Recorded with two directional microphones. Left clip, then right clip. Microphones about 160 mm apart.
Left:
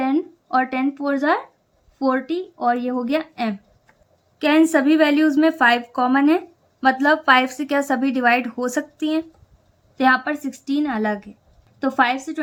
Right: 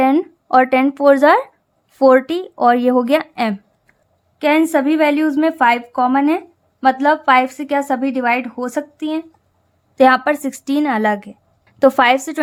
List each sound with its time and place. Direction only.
0.0 s speech: 50° right (ahead or behind)
4.4 s a woman's voice: 20° right (ahead or behind)
10.0 s a woman's voice: 45° right (ahead or behind)
11.8 s speech: 55° right (ahead or behind)